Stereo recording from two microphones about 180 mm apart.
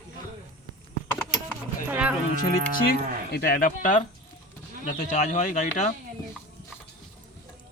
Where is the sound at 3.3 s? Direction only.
55° left (ahead or behind).